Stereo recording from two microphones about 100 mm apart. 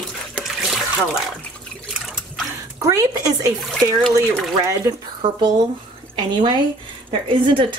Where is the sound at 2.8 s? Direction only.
35° right (ahead or behind).